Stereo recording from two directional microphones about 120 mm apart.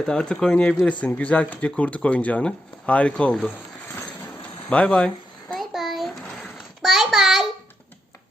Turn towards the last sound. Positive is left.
turn(degrees=0)  # may be behind; listen again after turning